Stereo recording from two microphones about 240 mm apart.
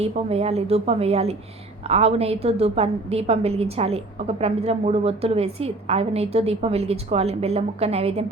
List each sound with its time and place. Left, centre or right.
0.0 s a woman's voice: right